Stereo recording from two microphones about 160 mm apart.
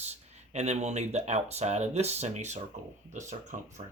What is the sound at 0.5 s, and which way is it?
Speech, 45° right (ahead or behind).